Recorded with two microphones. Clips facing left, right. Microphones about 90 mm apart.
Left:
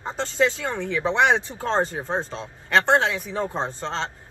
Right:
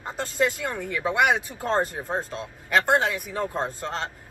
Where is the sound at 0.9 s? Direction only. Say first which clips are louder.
Left 2 dB; 25° left (ahead or behind).